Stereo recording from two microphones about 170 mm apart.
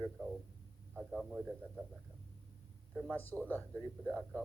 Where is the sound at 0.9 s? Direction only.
Centre (ahead or behind).